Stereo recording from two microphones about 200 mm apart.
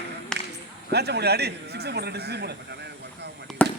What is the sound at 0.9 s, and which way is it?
A man's voice, 55° right (ahead or behind).